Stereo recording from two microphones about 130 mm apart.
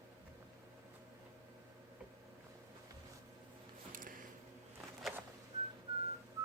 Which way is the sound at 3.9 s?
90° right.